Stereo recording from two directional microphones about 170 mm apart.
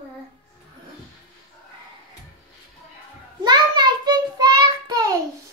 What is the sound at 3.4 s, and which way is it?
Child singing, 25° right (ahead or behind).